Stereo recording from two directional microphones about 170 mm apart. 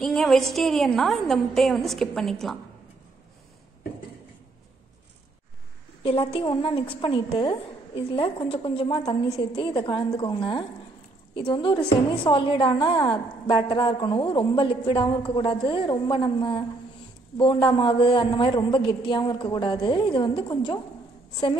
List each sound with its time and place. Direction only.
0.0 s a woman's voice: centre (ahead or behind)
6.0 s a woman's voice: 30° left (ahead or behind)